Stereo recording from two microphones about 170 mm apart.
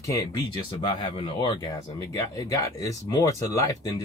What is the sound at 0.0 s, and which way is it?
Speech, 20° left (ahead or behind).